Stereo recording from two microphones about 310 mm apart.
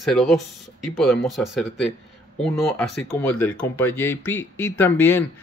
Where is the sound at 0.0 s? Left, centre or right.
Centre.